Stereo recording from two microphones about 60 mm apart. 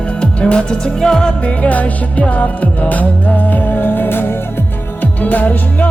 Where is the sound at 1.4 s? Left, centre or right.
Left.